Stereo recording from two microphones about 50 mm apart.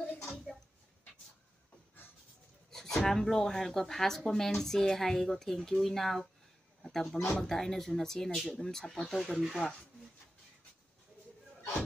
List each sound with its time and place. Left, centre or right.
0.5 s a sound: centre
2.7 s speech: centre
9.6 s speech: left